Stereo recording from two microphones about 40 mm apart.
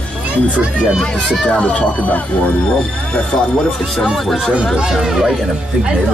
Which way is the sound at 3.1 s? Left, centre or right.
Left.